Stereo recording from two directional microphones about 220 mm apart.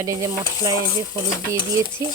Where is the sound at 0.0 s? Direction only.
15° right (ahead or behind).